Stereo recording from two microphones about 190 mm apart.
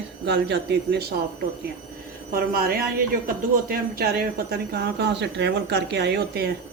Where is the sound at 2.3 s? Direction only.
50° right (ahead or behind).